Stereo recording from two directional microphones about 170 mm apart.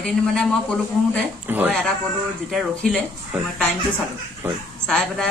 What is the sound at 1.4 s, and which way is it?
Speech, 10° right (ahead or behind).